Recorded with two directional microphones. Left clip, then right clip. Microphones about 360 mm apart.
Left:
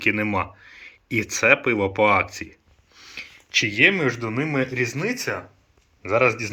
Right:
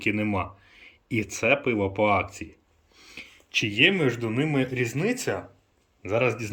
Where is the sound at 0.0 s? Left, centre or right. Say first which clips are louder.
Left 5 dB; centre.